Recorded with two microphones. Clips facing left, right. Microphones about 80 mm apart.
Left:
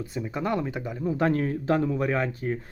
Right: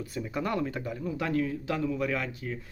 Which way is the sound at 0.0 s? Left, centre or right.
Left.